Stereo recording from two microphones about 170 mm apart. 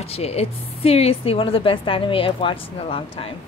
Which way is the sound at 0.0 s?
35° left (ahead or behind).